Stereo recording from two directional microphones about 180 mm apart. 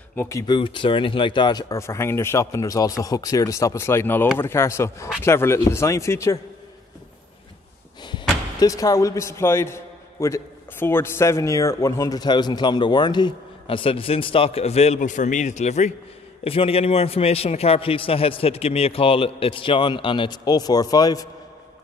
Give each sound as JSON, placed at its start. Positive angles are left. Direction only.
{"t": 0.1, "sound": "speech", "side_deg": 15}
{"t": 0.6, "sound": "speech", "side_deg": 30}
{"t": 8.0, "sound": "a man's voice", "side_deg": 20}